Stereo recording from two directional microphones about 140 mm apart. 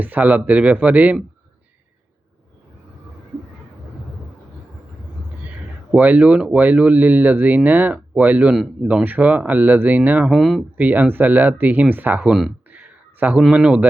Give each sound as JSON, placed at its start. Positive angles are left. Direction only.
{"t": 0.0, "sound": "speech", "side_deg": -10}
{"t": 5.9, "sound": "speech", "side_deg": -10}
{"t": 12.6, "sound": "a sound", "side_deg": -10}